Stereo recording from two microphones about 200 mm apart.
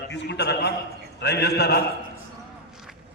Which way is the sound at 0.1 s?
60° left (ahead or behind).